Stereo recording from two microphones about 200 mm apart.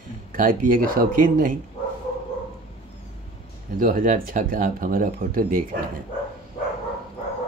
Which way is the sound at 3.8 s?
45° right (ahead or behind).